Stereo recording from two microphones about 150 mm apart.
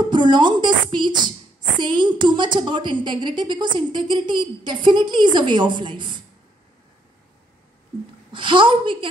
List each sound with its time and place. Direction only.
0.0 s a woman's voice: 30° right (ahead or behind)
8.3 s a woman's voice: 35° right (ahead or behind)